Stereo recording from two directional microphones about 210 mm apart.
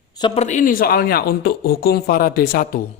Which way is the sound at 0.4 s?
40° left (ahead or behind).